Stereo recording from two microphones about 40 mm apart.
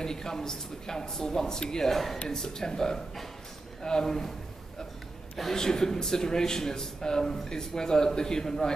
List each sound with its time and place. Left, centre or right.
0.0 s speech: centre
5.4 s speech: centre